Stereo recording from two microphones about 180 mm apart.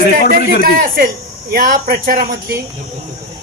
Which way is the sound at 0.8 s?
55° right (ahead or behind).